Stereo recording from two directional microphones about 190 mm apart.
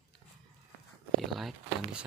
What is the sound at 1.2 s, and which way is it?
Speech, centre (ahead or behind).